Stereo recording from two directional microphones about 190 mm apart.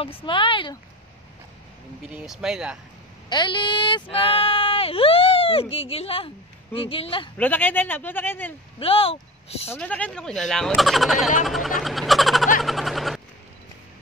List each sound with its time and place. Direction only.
0.0 s speech: 30° left (ahead or behind)
2.0 s speech: centre (ahead or behind)
3.3 s speech: 25° left (ahead or behind)
7.3 s speech: 10° left (ahead or behind)
8.7 s speech: 30° left (ahead or behind)
9.7 s speech: 5° left (ahead or behind)
11.4 s a sound: centre (ahead or behind)